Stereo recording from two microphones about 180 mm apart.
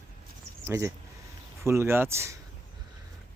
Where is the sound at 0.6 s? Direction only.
15° right (ahead or behind).